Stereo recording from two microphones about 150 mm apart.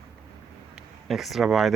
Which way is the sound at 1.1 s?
Centre (ahead or behind).